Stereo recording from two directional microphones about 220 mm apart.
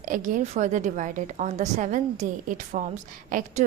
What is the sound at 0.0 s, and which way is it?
A woman's voice, 35° right (ahead or behind).